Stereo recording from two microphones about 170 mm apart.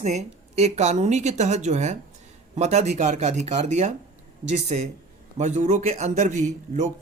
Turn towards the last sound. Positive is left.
turn(degrees=-40)  # may be behind; listen again after turning